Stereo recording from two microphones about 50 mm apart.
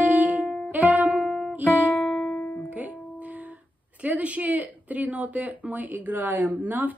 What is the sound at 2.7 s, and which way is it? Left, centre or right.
Music, right.